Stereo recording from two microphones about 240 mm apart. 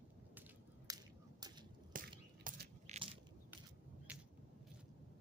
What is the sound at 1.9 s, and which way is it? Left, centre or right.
Crushing, right.